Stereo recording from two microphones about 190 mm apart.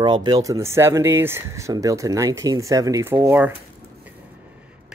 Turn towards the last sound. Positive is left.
turn(degrees=-10)  # may be behind; listen again after turning